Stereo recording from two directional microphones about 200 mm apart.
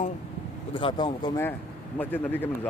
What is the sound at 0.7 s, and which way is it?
Speech, 25° left (ahead or behind).